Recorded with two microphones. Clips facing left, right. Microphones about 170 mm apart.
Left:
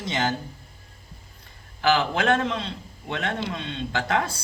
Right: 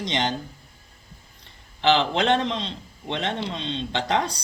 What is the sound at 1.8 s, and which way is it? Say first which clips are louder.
A man's voice: right 1 dB; 25° right (ahead or behind).